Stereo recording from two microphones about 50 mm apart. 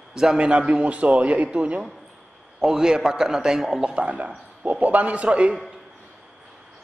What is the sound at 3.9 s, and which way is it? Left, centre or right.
A man's voice, right.